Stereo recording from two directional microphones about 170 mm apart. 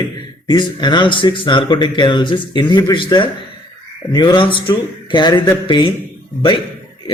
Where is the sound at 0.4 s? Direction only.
25° left (ahead or behind).